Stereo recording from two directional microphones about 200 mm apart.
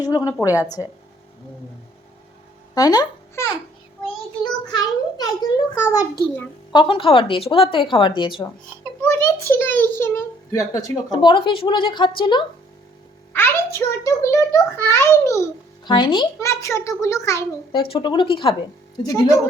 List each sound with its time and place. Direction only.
0.0 s a child's voice: 15° left (ahead or behind)
2.7 s a child's voice: 20° left (ahead or behind)
4.4 s a sound: 20° left (ahead or behind)
5.8 s a child's voice: 15° left (ahead or behind)
6.7 s a child's voice: 25° left (ahead or behind)
9.0 s a child's voice: 10° left (ahead or behind)
13.3 s a child's voice: 10° left (ahead or behind)